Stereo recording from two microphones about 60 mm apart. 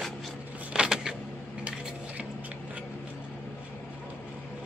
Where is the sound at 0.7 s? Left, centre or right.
Centre.